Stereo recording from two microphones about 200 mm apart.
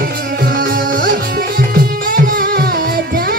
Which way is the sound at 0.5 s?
45° right (ahead or behind).